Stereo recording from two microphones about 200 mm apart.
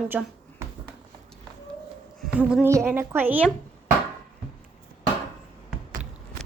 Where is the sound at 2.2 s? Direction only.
5° right (ahead or behind).